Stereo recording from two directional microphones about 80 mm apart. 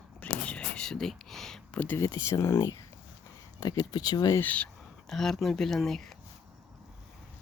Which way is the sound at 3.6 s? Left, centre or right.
Left.